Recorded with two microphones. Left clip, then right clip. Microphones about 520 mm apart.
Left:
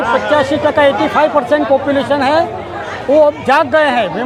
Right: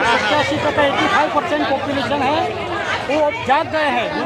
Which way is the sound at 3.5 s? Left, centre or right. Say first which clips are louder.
Left 6 dB; left.